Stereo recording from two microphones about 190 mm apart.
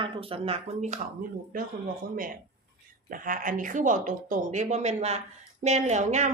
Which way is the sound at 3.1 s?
45° right (ahead or behind).